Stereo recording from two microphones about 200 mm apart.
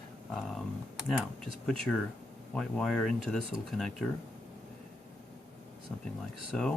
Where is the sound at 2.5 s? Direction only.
Centre (ahead or behind).